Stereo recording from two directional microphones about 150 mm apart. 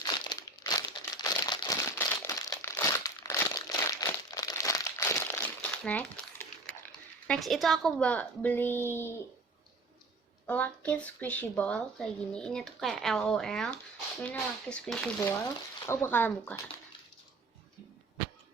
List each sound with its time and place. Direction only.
0.0 s crumpling: 20° left (ahead or behind)
7.3 s a child's voice: centre (ahead or behind); by 9.1 s 15° left (ahead or behind)
10.4 s a child's voice: 10° left (ahead or behind)
15.9 s a child's voice: 15° left (ahead or behind)